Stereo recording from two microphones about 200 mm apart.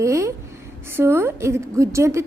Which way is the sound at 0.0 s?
15° right (ahead or behind).